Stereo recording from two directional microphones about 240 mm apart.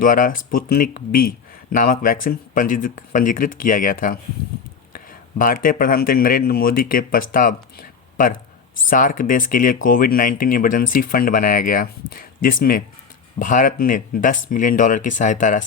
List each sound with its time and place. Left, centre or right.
0.0 s speech: left